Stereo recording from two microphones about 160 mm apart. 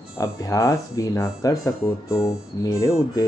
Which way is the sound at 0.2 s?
20° left (ahead or behind).